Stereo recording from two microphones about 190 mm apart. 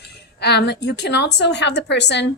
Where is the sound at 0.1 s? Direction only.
60° left (ahead or behind).